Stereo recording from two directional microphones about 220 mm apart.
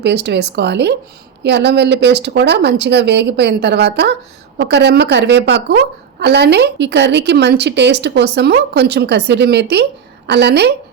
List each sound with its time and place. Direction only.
0.0 s a woman's voice: 50° right (ahead or behind)